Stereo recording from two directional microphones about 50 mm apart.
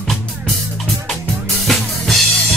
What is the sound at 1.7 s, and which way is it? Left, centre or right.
Drum kit, centre.